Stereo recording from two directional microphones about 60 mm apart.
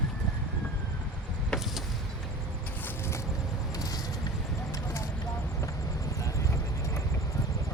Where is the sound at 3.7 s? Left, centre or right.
Left.